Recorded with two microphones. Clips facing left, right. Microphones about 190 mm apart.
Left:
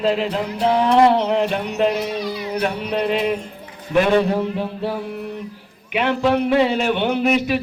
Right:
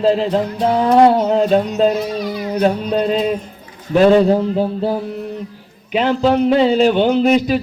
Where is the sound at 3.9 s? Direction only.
35° right (ahead or behind).